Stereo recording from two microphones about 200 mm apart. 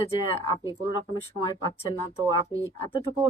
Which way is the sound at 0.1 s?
25° left (ahead or behind).